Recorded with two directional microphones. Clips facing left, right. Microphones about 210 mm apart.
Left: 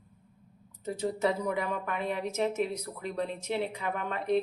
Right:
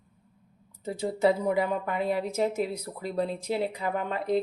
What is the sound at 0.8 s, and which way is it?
Speech, 30° right (ahead or behind).